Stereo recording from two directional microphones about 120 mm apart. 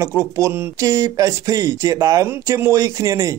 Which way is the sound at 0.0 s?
25° right (ahead or behind).